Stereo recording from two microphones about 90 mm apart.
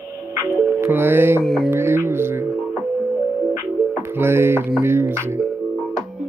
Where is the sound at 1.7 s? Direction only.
25° right (ahead or behind).